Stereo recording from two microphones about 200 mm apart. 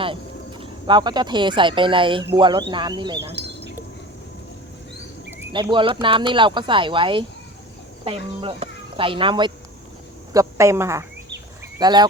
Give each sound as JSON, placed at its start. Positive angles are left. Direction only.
{"t": 0.6, "sound": "speech", "side_deg": -20}
{"t": 5.7, "sound": "a woman's voice", "side_deg": -25}